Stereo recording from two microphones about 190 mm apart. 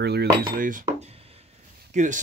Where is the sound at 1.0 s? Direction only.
30° right (ahead or behind).